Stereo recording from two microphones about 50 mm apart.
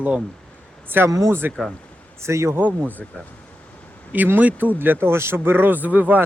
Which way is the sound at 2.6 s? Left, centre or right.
Right.